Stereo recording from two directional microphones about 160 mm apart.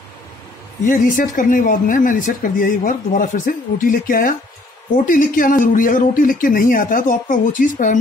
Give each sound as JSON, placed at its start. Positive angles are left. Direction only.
{"t": 0.8, "sound": "speech", "side_deg": 55}